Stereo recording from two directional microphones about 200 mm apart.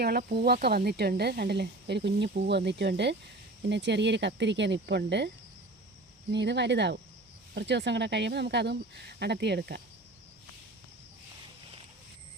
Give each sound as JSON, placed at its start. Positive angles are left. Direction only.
{"t": 0.0, "sound": "speech", "side_deg": -50}
{"t": 6.3, "sound": "speech", "side_deg": -60}